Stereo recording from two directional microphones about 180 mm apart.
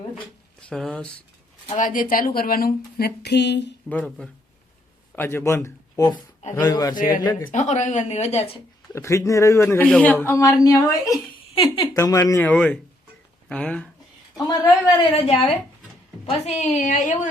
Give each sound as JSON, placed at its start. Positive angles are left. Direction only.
{"t": 0.7, "sound": "speech", "side_deg": 5}
{"t": 1.6, "sound": "a woman's voice", "side_deg": 40}
{"t": 3.8, "sound": "a man's voice", "side_deg": 5}
{"t": 6.9, "sound": "speech", "side_deg": 50}
{"t": 7.3, "sound": "a man's voice", "side_deg": 15}
{"t": 7.5, "sound": "a woman's voice", "side_deg": 40}
{"t": 8.9, "sound": "a man's voice", "side_deg": 15}
{"t": 11.9, "sound": "a man's voice", "side_deg": 20}
{"t": 14.3, "sound": "a woman's voice", "side_deg": 20}
{"t": 16.2, "sound": "a woman's voice", "side_deg": 35}